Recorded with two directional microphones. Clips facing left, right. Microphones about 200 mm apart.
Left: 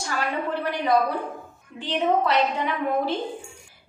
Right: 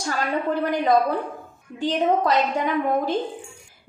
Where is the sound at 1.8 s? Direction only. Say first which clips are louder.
Right 2 dB; 45° right (ahead or behind).